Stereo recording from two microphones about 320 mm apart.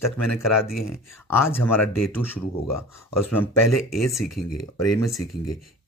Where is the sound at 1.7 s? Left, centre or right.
Left.